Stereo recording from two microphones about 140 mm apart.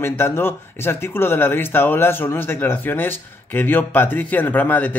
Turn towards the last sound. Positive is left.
turn(degrees=10)  # may be behind; listen again after turning